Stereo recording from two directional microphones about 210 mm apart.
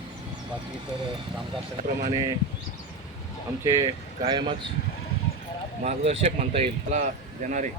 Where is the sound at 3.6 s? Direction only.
20° right (ahead or behind).